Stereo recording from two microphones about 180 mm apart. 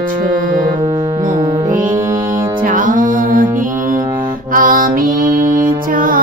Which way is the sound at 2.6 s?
50° right (ahead or behind).